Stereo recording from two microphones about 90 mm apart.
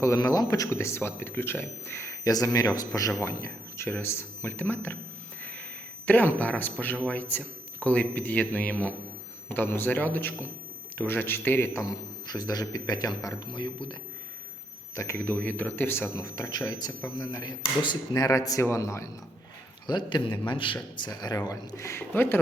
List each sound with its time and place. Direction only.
0.0 s speech: 40° left (ahead or behind)
2.2 s a man's voice: 45° left (ahead or behind)
3.2 s speech: 30° left (ahead or behind)
5.4 s a sound: 15° left (ahead or behind)
6.1 s a man's voice: 20° left (ahead or behind)
11.9 s a man's voice: 50° left (ahead or behind)
14.9 s speech: 35° left (ahead or behind)
15.2 s speech: 20° left (ahead or behind)
16.2 s a man's voice: 40° left (ahead or behind)
19.9 s a man's voice: 55° left (ahead or behind); by 20.7 s 70° left (ahead or behind)
20.9 s a man's voice: 50° left (ahead or behind)
21.8 s speech: 25° left (ahead or behind)